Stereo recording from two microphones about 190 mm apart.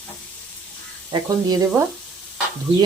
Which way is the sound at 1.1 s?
20° right (ahead or behind).